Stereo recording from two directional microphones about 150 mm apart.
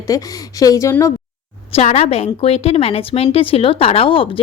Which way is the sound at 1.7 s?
40° left (ahead or behind).